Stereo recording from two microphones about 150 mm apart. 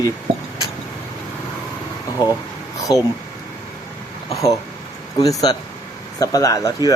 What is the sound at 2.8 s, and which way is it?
Speech, 20° left (ahead or behind).